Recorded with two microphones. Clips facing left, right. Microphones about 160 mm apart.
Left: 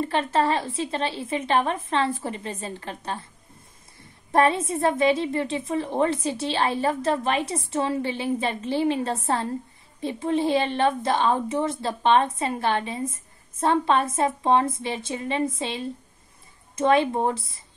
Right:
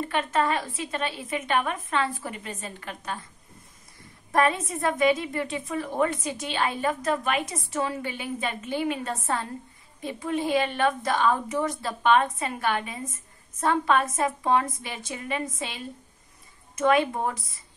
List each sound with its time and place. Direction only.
0.1 s a woman's voice: 30° left (ahead or behind)
4.3 s a woman's voice: 30° left (ahead or behind)